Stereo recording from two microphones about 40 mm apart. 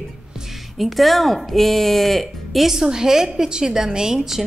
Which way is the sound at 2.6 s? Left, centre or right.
Centre.